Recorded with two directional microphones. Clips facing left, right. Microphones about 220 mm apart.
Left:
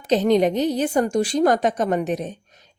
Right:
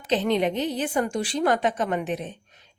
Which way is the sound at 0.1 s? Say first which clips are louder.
Left 5 dB; 40° left (ahead or behind).